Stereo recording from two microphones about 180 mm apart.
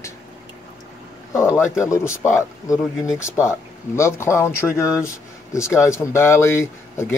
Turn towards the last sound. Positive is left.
turn(degrees=15)  # may be behind; listen again after turning